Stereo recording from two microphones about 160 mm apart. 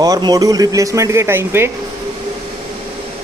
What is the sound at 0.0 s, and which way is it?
Speech, 25° right (ahead or behind).